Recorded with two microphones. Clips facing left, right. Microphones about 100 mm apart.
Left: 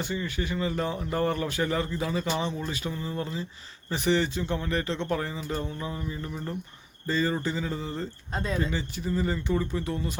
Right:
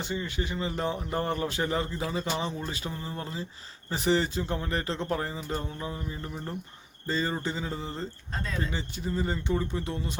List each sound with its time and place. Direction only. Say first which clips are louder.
0.0 s speech: left 1 dB; 25° right (ahead or behind)
8.3 s speech: left 5 dB; 20° left (ahead or behind)
8.7 s speech: left 2 dB; 25° right (ahead or behind)